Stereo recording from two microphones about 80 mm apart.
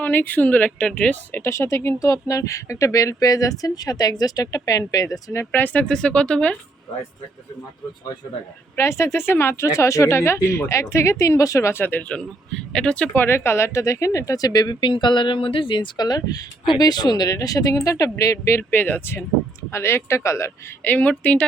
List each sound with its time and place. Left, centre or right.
0.0 s speech: left
1.4 s speech: left
5.5 s speech: left
8.8 s speech: left
11.7 s speech: left
12.7 s speech: centre
13.1 s speech: left
20.8 s speech: left